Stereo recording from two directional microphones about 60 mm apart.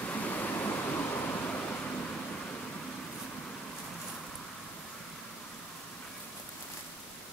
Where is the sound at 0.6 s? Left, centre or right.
Left.